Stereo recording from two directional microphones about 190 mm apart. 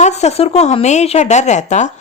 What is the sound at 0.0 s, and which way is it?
Speech, 35° left (ahead or behind).